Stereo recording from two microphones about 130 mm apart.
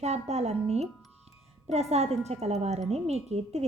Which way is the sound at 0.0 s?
55° right (ahead or behind).